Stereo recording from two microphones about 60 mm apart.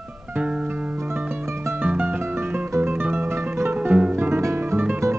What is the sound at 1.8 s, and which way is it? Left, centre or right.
Music, right.